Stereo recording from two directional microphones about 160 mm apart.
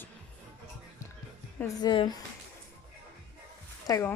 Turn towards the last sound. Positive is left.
turn(degrees=20)  # may be behind; listen again after turning